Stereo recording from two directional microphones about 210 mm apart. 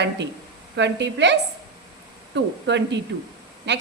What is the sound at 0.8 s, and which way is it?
A woman's voice, 55° right (ahead or behind).